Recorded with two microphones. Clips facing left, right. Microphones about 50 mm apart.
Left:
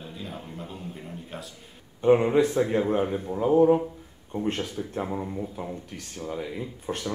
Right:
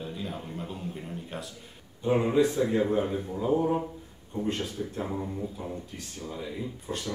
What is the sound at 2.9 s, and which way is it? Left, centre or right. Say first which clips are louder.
Speech: left 2 dB; left.